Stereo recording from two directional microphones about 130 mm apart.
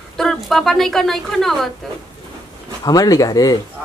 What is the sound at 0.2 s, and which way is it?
A woman's voice, centre (ahead or behind).